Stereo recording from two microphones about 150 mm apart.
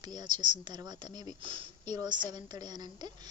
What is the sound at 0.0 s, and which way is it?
Speech, 25° right (ahead or behind).